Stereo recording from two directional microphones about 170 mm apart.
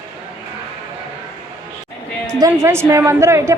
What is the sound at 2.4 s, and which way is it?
A woman's voice, 15° right (ahead or behind).